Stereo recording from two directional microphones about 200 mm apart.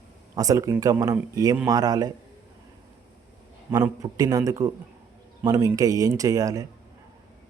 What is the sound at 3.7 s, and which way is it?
Speech, 20° right (ahead or behind).